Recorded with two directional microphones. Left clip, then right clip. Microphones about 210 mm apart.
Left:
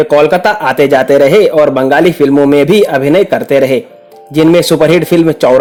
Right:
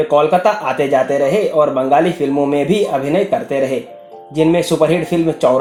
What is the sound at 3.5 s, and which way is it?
Speech, 50° left (ahead or behind).